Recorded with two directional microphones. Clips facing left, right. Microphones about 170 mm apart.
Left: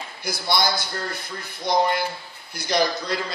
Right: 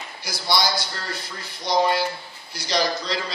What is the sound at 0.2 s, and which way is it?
A man's voice, 55° left (ahead or behind).